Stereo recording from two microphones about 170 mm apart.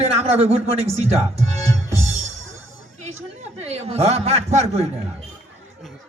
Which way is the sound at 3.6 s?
40° right (ahead or behind).